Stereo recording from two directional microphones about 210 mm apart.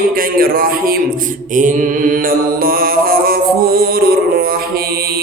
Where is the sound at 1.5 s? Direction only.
35° right (ahead or behind).